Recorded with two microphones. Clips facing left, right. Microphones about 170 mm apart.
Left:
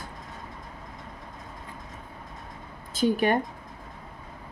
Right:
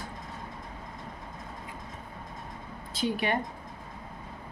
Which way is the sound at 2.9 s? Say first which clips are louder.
Left 6 dB; 45° left (ahead or behind).